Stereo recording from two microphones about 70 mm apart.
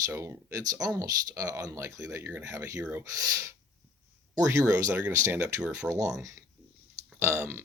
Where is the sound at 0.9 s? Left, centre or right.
Right.